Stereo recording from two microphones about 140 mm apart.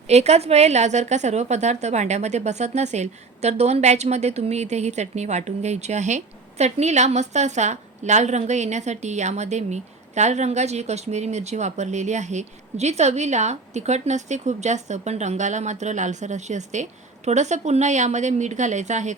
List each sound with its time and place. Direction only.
0.1 s a woman's voice: 50° right (ahead or behind)